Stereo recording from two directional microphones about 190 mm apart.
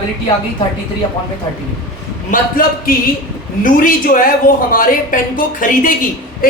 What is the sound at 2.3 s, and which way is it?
Speech, 50° left (ahead or behind).